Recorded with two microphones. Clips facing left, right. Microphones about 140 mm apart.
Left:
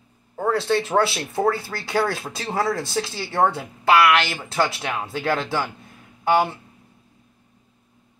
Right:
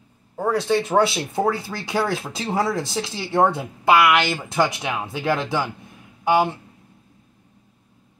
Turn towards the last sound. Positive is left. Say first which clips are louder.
# right 1 dB
turn(degrees=-10)  # may be behind; listen again after turning